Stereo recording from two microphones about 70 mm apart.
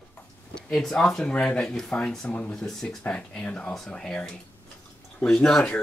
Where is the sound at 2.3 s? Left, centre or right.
Left.